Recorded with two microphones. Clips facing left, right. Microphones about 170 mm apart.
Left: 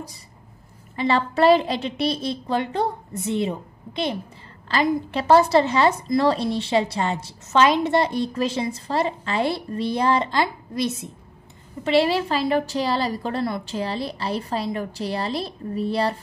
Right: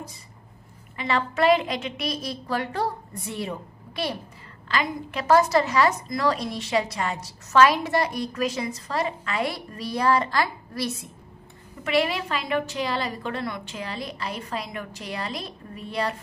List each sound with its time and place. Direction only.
0.9 s a woman's voice: 35° left (ahead or behind)